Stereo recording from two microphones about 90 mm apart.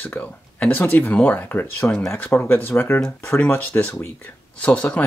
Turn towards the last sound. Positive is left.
turn(degrees=15)  # may be behind; listen again after turning